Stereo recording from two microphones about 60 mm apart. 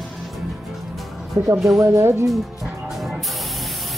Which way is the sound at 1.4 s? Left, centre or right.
Right.